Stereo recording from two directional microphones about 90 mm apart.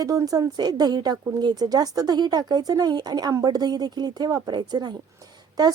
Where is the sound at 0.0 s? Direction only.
40° right (ahead or behind).